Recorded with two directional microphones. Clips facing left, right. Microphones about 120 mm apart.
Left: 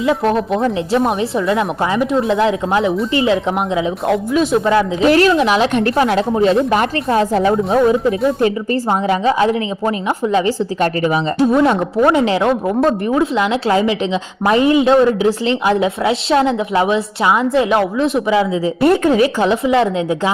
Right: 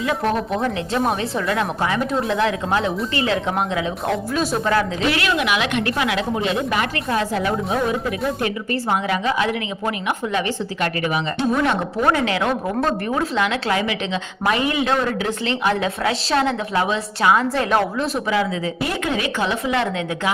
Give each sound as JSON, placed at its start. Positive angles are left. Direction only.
{"t": 0.0, "sound": "a woman's voice", "side_deg": 25}
{"t": 5.0, "sound": "a woman's voice", "side_deg": 40}
{"t": 17.7, "sound": "speech", "side_deg": 10}
{"t": 18.3, "sound": "a woman's voice", "side_deg": 25}
{"t": 18.8, "sound": "speech", "side_deg": 45}
{"t": 19.1, "sound": "a woman's voice", "side_deg": 30}